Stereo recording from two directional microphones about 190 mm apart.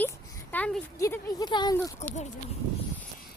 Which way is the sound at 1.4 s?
20° left (ahead or behind).